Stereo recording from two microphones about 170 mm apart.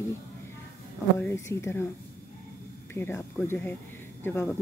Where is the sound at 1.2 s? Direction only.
15° left (ahead or behind).